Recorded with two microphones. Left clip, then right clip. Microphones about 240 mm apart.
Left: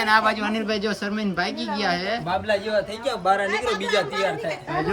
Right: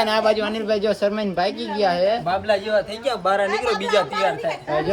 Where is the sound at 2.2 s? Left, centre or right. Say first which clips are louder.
Right 3 dB; centre.